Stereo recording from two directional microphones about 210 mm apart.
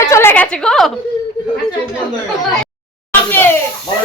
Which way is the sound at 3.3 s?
10° left (ahead or behind).